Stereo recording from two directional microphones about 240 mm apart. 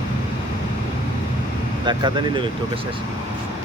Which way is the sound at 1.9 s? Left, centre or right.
Centre.